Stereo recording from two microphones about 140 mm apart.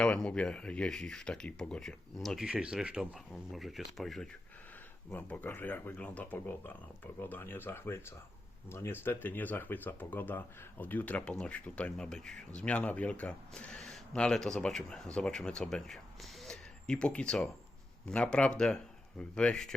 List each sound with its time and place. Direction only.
0.0 s speech: 5° left (ahead or behind)
5.1 s speech: 15° left (ahead or behind)